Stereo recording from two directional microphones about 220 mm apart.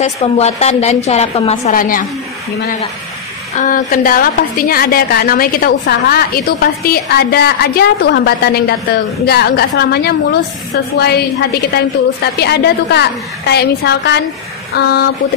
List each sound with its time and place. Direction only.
0.0 s a woman's voice: 30° left (ahead or behind)
1.7 s a woman's voice: 40° left (ahead or behind)
3.6 s a woman's voice: 40° left (ahead or behind)
11.7 s a woman's voice: 50° left (ahead or behind)